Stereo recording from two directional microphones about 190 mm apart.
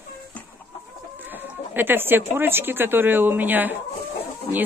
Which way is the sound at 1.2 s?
10° right (ahead or behind).